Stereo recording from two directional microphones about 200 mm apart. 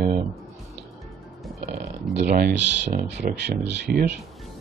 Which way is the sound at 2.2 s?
45° right (ahead or behind).